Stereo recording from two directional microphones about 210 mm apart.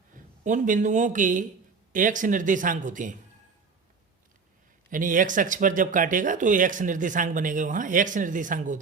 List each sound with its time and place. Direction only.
0.4 s speech: 35° right (ahead or behind)
4.9 s speech: 40° right (ahead or behind)